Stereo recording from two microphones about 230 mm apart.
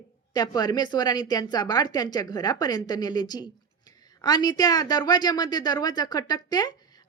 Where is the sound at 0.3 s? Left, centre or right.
Centre.